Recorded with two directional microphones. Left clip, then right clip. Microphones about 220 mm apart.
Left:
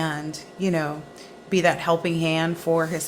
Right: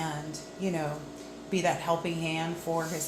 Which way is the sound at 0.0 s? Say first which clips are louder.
Left 7 dB; 45° left (ahead or behind).